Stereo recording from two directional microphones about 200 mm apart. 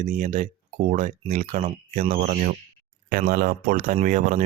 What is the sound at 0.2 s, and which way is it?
Speech, 35° right (ahead or behind).